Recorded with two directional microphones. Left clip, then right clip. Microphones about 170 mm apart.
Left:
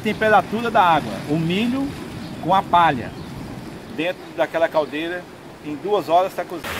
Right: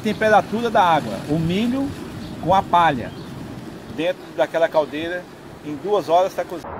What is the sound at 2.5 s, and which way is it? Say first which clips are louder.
Speech: even; 30° right (ahead or behind).